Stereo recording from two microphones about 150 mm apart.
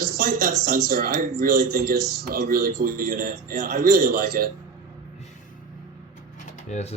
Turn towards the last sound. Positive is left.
turn(degrees=50)  # may be behind; listen again after turning